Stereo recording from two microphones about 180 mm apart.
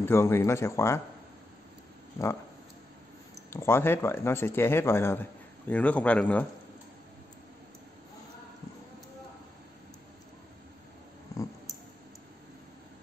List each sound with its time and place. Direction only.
0.0 s speech: 15° left (ahead or behind)
3.4 s speech: 15° left (ahead or behind)